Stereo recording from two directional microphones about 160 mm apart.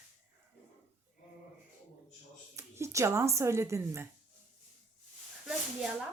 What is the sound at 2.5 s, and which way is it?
Speech, 15° right (ahead or behind).